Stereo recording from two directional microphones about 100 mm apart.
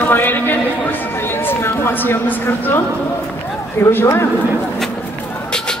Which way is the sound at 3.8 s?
20° left (ahead or behind).